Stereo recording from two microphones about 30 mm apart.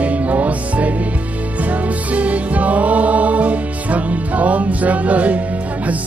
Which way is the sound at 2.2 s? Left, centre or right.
Right.